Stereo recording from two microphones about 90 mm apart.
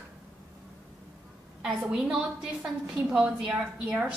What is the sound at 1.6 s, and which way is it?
A woman's voice, 5° right (ahead or behind).